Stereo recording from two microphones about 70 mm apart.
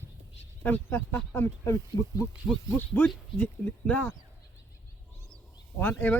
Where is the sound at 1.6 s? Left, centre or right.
Left.